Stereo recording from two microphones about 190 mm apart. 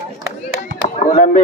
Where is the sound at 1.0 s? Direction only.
40° left (ahead or behind).